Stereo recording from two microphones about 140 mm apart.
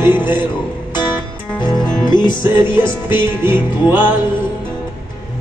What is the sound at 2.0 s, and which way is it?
Music, 30° left (ahead or behind).